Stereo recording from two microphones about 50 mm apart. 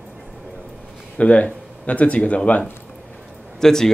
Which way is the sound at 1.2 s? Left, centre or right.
Left.